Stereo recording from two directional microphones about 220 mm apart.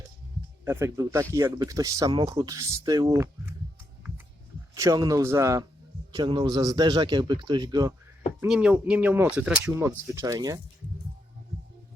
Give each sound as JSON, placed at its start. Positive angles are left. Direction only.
{"t": 0.6, "sound": "speech", "side_deg": -10}
{"t": 4.7, "sound": "a man's voice", "side_deg": -15}
{"t": 8.4, "sound": "speech", "side_deg": -5}